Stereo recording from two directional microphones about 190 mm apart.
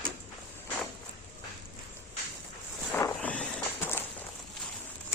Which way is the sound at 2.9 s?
10° left (ahead or behind).